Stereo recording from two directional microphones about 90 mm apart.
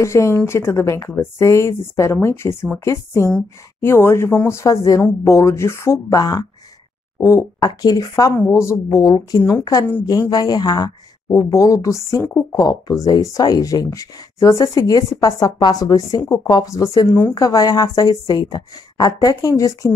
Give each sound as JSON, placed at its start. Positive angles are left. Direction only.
{"t": 0.0, "sound": "speech", "side_deg": 30}
{"t": 6.1, "sound": "a woman's voice", "side_deg": 50}
{"t": 7.2, "sound": "a woman's voice", "side_deg": 35}
{"t": 11.2, "sound": "a woman's voice", "side_deg": 40}